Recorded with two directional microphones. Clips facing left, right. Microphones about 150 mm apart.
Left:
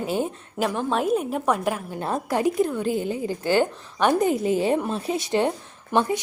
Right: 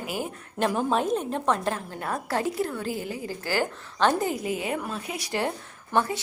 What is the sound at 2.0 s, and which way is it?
A woman's voice, 20° left (ahead or behind).